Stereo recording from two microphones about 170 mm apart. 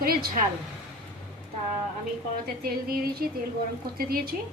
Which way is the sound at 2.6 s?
65° right (ahead or behind).